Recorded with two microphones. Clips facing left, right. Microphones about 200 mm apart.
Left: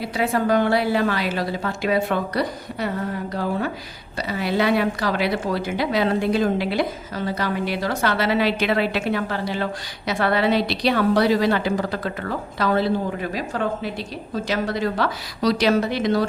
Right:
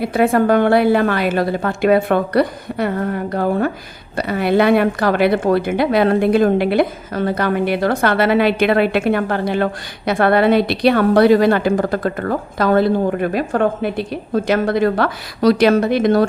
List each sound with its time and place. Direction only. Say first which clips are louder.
0.0 s a woman's voice: right 7 dB; 55° right (ahead or behind)